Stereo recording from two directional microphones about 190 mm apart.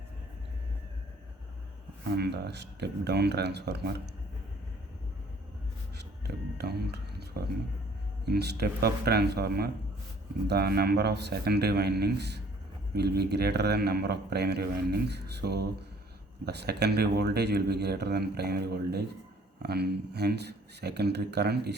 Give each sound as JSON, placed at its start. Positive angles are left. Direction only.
{"t": 2.1, "sound": "speech", "side_deg": -60}
{"t": 6.6, "sound": "speech", "side_deg": -60}